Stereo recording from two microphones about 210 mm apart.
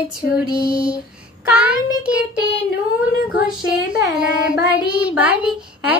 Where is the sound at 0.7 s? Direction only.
25° right (ahead or behind).